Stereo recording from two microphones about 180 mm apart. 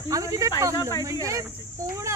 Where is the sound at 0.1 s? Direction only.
15° right (ahead or behind).